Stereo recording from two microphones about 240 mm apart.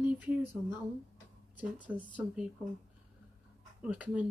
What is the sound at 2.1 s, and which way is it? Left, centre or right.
Speech, centre.